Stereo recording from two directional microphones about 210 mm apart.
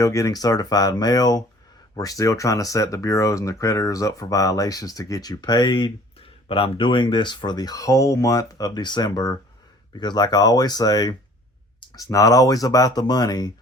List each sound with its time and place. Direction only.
0.0 s speech: 15° left (ahead or behind)